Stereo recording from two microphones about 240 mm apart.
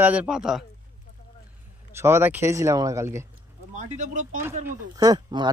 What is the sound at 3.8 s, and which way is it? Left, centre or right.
Speech, right.